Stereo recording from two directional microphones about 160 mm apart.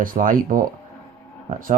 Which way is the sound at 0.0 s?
60° right (ahead or behind).